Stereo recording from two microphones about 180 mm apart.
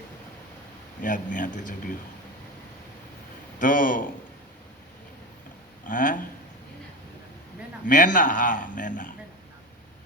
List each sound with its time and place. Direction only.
1.0 s a man's voice: 45° left (ahead or behind)
3.6 s a man's voice: 50° left (ahead or behind)
5.8 s speech: 45° left (ahead or behind)
7.9 s a man's voice: 45° left (ahead or behind)